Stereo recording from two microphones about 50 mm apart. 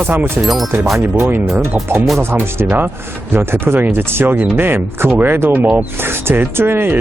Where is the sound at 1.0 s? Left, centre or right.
Right.